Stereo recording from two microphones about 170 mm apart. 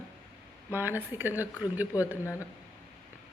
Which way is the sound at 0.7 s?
10° right (ahead or behind).